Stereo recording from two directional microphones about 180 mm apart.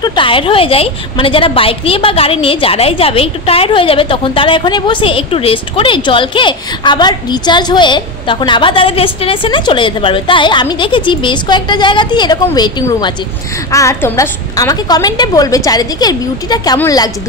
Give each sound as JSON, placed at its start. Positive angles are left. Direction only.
{"t": 0.0, "sound": "a woman's voice", "side_deg": 25}